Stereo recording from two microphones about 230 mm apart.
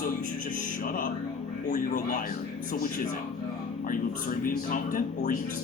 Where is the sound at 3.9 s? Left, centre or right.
Left.